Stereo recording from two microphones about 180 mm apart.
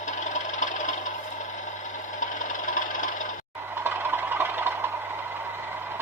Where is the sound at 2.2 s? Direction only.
45° left (ahead or behind).